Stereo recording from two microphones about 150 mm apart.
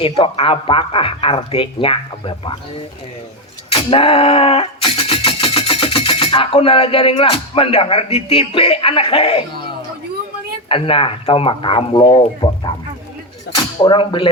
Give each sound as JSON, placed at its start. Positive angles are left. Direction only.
{"t": 0.0, "sound": "speech", "side_deg": 40}
{"t": 3.7, "sound": "a sound", "side_deg": 35}
{"t": 10.7, "sound": "speech", "side_deg": 35}
{"t": 13.8, "sound": "speech", "side_deg": 35}